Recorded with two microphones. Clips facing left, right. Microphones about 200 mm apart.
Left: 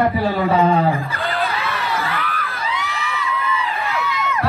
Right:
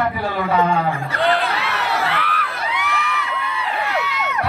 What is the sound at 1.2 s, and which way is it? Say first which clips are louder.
Crowd: right 5 dB; 85° right.